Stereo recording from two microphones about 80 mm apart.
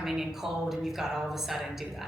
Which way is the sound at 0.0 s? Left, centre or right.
Centre.